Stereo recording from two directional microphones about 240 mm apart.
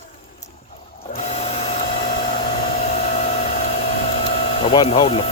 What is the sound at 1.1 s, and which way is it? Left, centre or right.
Printer, left.